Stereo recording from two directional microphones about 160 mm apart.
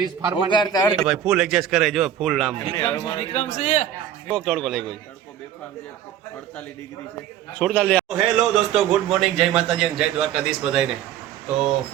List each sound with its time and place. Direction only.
0.5 s a man's voice: 25° left (ahead or behind)
1.0 s a man's voice: 5° right (ahead or behind)
2.7 s a man's voice: 25° left (ahead or behind)
3.2 s a man's voice: 45° left (ahead or behind)
4.4 s a man's voice: 5° left (ahead or behind)
7.6 s a man's voice: 5° left (ahead or behind)